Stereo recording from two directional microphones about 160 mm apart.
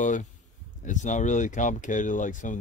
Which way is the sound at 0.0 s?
55° left (ahead or behind).